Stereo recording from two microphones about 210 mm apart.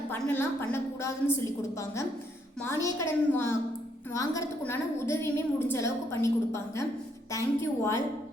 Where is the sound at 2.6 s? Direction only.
15° left (ahead or behind).